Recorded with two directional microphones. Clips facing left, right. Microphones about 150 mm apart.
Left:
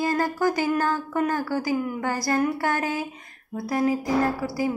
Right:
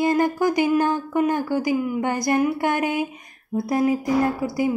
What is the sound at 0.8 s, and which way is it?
A woman's voice, 15° right (ahead or behind).